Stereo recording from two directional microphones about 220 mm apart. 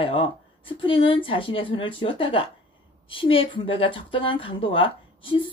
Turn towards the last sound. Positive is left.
turn(degrees=25)  # may be behind; listen again after turning